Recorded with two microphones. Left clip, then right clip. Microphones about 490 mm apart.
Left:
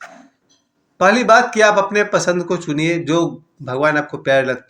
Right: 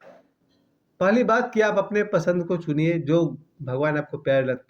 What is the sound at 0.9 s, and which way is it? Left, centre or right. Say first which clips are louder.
Speech: left 9 dB; right.